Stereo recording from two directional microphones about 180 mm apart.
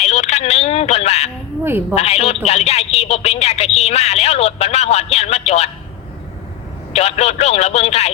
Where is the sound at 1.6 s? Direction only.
10° right (ahead or behind).